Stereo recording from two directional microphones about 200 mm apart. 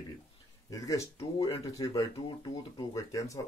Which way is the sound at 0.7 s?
15° left (ahead or behind).